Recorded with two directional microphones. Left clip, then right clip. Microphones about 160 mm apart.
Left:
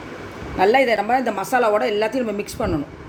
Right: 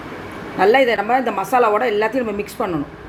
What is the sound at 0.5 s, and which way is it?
A woman's voice, 15° left (ahead or behind).